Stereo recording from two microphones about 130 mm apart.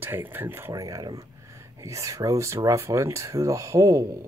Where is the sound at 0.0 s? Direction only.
15° right (ahead or behind).